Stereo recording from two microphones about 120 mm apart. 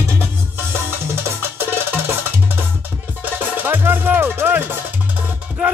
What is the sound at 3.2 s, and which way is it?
Music, 15° right (ahead or behind).